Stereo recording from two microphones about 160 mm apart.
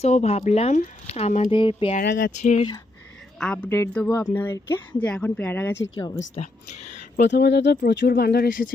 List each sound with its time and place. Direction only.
0.0 s speech: 45° left (ahead or behind)
1.5 s speech: 35° left (ahead or behind)
2.0 s speech: 65° left (ahead or behind)
2.4 s speech: 45° left (ahead or behind)
3.4 s speech: 10° left (ahead or behind)
6.3 s speech: 45° left (ahead or behind)
7.2 s speech: 90° left; by 8.6 s 65° left (ahead or behind)